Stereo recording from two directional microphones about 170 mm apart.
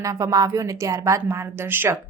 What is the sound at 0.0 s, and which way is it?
A woman's voice, 20° right (ahead or behind).